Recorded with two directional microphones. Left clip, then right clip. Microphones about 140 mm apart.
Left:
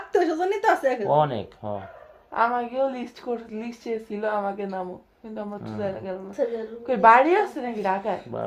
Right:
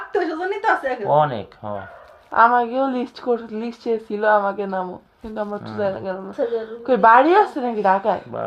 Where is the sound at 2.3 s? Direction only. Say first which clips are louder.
Right 8 dB; 45° right (ahead or behind).